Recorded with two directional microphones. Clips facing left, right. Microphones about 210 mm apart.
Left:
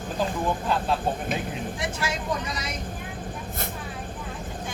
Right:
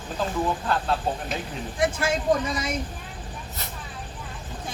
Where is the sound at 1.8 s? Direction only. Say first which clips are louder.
Right 9 dB; 50° right (ahead or behind).